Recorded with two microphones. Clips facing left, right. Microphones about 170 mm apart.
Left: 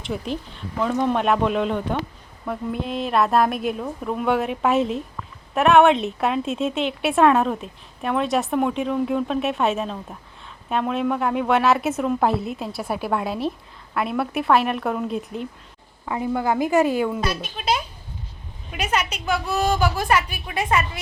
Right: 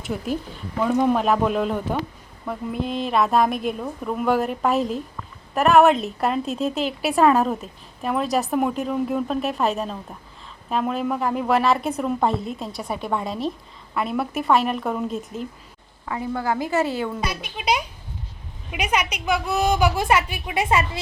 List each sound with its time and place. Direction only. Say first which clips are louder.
0.0 s a woman's voice: right 1 dB; 5° right (ahead or behind)
16.0 s a woman's voice: left 2 dB; 20° left (ahead or behind)
17.2 s a woman's voice: left 2 dB; 15° right (ahead or behind)